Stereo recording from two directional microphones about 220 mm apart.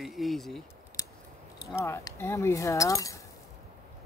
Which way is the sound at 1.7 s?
10° left (ahead or behind).